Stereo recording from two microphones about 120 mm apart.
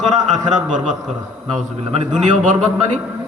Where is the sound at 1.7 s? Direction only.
60° right (ahead or behind).